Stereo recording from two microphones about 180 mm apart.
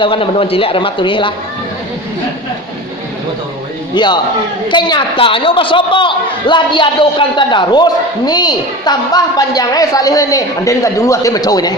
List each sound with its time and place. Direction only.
0.0 s a man's voice: 30° left (ahead or behind)
3.9 s a man's voice: 25° left (ahead or behind)